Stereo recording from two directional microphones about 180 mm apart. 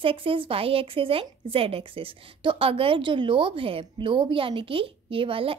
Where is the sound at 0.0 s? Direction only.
30° right (ahead or behind).